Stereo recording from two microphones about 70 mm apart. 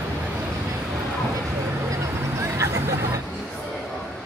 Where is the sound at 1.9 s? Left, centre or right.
Right.